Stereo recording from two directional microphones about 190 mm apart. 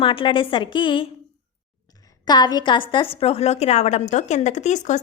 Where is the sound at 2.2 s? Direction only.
20° left (ahead or behind).